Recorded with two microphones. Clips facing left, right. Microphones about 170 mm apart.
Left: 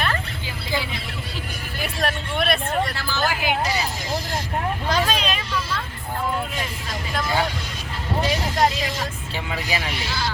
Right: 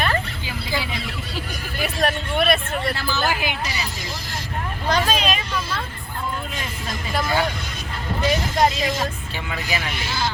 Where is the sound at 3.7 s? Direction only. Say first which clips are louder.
Left 5 dB; 45° left (ahead or behind).